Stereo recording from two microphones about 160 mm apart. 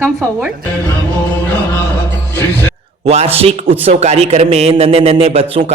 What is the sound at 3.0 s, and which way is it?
A man's voice, 40° right (ahead or behind).